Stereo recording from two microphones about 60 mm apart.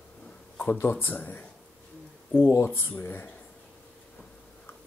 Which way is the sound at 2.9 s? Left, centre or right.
Left.